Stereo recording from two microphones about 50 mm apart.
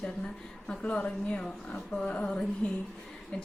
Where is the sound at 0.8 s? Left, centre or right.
Left.